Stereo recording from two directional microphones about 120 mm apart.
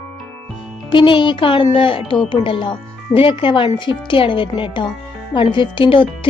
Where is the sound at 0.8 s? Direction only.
45° left (ahead or behind).